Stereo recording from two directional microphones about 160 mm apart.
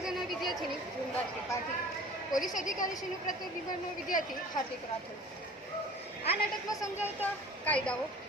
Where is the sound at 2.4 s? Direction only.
55° left (ahead or behind).